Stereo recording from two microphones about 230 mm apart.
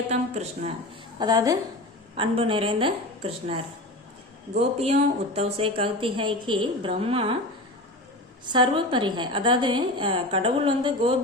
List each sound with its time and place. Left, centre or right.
0.1 s a woman's voice: right
1.2 s a woman's voice: centre
4.8 s a woman's voice: right
8.4 s a woman's voice: centre